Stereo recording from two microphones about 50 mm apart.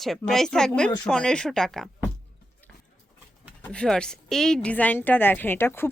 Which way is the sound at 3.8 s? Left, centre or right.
Centre.